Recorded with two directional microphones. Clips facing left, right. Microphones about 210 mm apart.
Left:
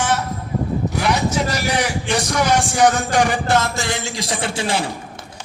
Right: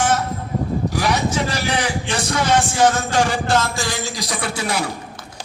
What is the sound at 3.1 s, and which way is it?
A man's voice, 20° left (ahead or behind).